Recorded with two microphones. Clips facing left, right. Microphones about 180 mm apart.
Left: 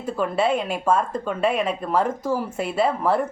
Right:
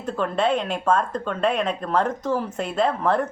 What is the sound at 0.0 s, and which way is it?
Speech, 5° left (ahead or behind).